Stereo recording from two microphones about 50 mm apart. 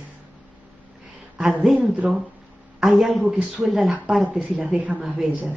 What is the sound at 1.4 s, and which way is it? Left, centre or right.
Speech, centre.